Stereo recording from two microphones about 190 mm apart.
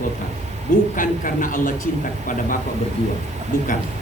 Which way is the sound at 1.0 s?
45° left (ahead or behind).